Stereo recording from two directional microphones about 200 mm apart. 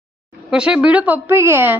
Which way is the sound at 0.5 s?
5° right (ahead or behind).